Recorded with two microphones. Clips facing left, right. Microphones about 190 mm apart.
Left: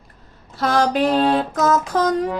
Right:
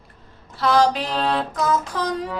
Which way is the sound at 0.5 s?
45° left (ahead or behind).